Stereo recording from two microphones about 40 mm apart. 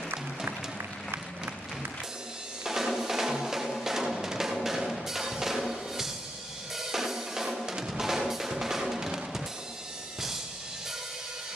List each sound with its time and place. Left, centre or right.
2.6 s drum: centre
4.6 s music: centre
6.8 s drum: centre